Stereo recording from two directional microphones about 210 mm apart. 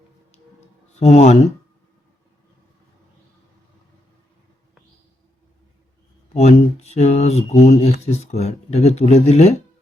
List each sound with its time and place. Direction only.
0.9 s speech: 35° left (ahead or behind)
6.3 s speech: 30° left (ahead or behind)